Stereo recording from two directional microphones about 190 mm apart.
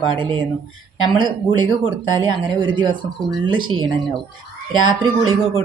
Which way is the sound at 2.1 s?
25° right (ahead or behind).